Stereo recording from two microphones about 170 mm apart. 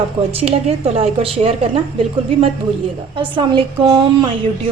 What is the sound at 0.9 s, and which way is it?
Speech, 35° right (ahead or behind).